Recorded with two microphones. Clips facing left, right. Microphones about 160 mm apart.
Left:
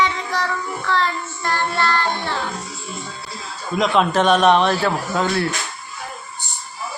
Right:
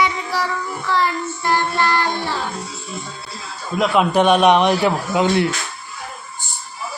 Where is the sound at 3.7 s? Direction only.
5° right (ahead or behind).